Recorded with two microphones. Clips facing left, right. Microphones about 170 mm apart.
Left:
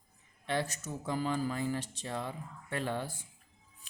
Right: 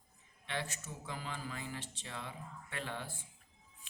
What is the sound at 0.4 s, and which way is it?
Speech, 40° left (ahead or behind).